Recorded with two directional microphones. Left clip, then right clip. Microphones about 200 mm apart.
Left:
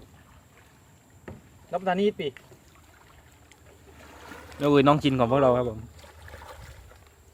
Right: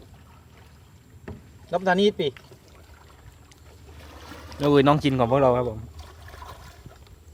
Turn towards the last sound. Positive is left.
turn(degrees=15)  # may be behind; listen again after turning